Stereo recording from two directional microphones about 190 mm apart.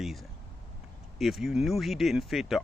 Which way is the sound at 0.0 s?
Centre (ahead or behind).